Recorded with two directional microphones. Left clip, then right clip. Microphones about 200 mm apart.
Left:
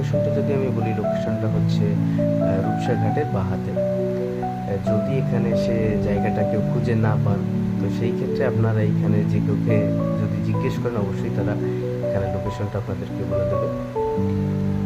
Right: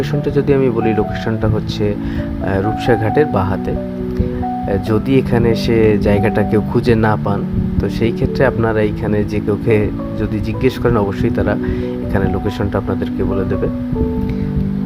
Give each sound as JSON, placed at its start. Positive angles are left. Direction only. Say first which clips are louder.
{"t": 0.5, "sound": "speech", "louder": "right 10 dB", "side_deg": -40}
{"t": 2.5, "sound": "speech", "louder": "right 8 dB", "side_deg": -40}
{"t": 4.9, "sound": "speech", "louder": "right 7 dB", "side_deg": -45}
{"t": 10.6, "sound": "speech", "louder": "right 11 dB", "side_deg": -40}